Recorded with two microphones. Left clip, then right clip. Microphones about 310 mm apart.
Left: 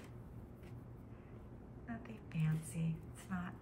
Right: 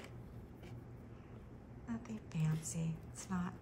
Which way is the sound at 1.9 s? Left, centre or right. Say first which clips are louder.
Right 3 dB; centre.